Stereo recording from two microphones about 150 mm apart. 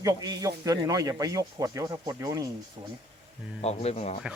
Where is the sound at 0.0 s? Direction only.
25° right (ahead or behind).